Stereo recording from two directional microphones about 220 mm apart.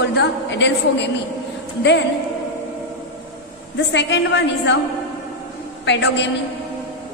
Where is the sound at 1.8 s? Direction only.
55° left (ahead or behind).